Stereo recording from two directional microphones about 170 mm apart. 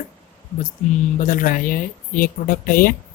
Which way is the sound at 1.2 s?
55° left (ahead or behind).